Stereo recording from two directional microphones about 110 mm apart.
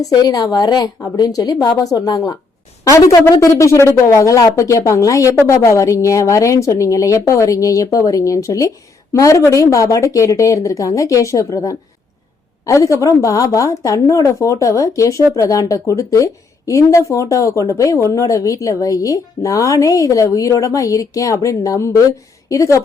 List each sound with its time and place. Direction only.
0.0 s a woman's voice: 35° left (ahead or behind)